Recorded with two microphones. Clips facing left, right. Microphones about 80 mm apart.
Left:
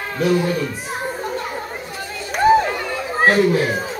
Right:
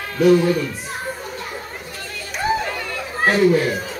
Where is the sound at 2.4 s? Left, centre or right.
Left.